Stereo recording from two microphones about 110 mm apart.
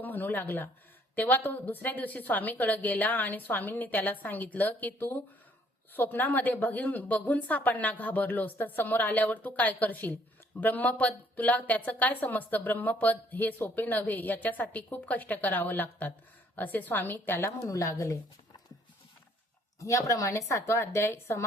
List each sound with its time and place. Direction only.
0.0 s speech: 15° left (ahead or behind)
17.6 s a woman's voice: 30° left (ahead or behind)
19.8 s a woman's voice: 30° left (ahead or behind)